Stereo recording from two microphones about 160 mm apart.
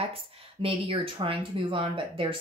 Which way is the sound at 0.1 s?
35° right (ahead or behind).